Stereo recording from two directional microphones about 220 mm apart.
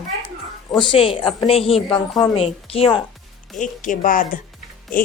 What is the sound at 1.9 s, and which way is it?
Speech, 5° left (ahead or behind).